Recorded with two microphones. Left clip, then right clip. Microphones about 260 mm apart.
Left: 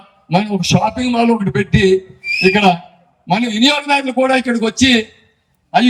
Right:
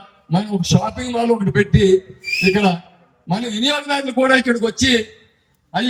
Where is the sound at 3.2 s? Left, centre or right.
Left.